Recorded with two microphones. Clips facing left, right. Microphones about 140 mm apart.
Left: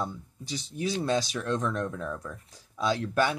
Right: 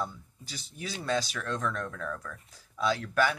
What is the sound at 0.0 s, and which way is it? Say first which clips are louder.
Speech: left 2 dB; 20° left (ahead or behind).